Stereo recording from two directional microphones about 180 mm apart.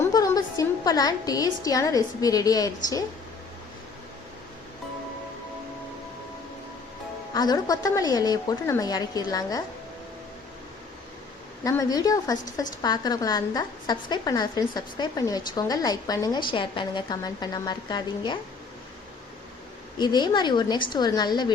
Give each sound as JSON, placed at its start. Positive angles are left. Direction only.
{"t": 0.0, "sound": "a woman's voice", "side_deg": 20}
{"t": 7.3, "sound": "a woman's voice", "side_deg": 20}
{"t": 11.6, "sound": "a woman's voice", "side_deg": 20}
{"t": 20.0, "sound": "a woman's voice", "side_deg": 25}